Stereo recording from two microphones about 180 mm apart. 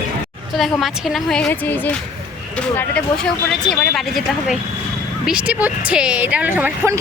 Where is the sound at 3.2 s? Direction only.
Centre (ahead or behind).